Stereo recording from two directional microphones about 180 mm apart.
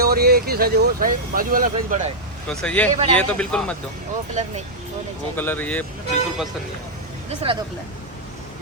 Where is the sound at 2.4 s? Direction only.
5° left (ahead or behind).